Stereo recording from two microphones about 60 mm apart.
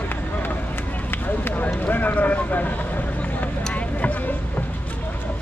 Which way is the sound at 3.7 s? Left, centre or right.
Left.